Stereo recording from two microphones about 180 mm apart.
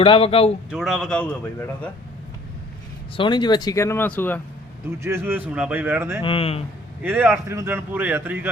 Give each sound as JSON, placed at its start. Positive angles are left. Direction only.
{"t": 0.0, "sound": "speech", "side_deg": 30}
{"t": 0.7, "sound": "a man's voice", "side_deg": 0}
{"t": 3.2, "sound": "speech", "side_deg": 25}
{"t": 5.0, "sound": "a man's voice", "side_deg": -15}
{"t": 6.2, "sound": "speech", "side_deg": 30}
{"t": 7.0, "sound": "a man's voice", "side_deg": -10}